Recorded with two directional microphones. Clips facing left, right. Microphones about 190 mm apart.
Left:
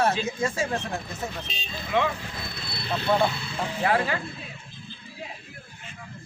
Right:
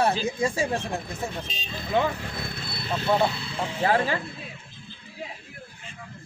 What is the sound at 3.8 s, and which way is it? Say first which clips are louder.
Speech: right 1 dB; 30° right (ahead or behind).